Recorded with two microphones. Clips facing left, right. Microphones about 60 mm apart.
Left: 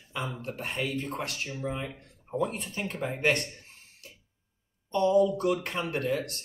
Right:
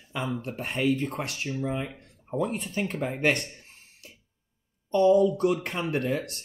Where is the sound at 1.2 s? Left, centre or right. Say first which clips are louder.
Right 3 dB; centre.